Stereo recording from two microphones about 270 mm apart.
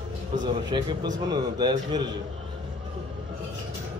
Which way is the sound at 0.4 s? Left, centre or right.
Centre.